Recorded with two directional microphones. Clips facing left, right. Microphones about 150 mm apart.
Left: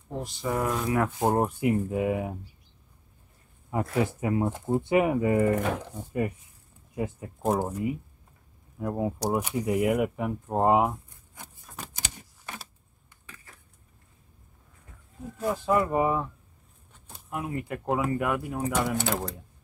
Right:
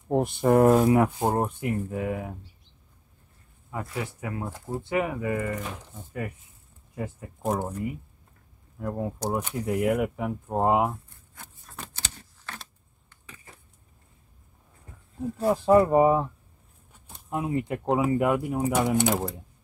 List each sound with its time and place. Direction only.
0.1 s speech: 55° right (ahead or behind)
0.7 s speech: 40° right (ahead or behind)
0.9 s speech: 20° right (ahead or behind)
1.2 s speech: centre (ahead or behind); by 2.3 s 15° left (ahead or behind)
3.7 s speech: 25° left (ahead or behind)
5.5 s speech: 60° left (ahead or behind)
7.4 s speech: 5° left (ahead or behind)
10.9 s tearing: 15° left (ahead or behind)
11.9 s keys jangling: 15° left (ahead or behind)
15.3 s speech: 30° right (ahead or behind)
17.3 s speech: 20° right (ahead or behind)